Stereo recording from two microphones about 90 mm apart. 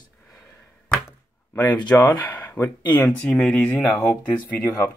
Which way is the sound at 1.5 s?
20° left (ahead or behind).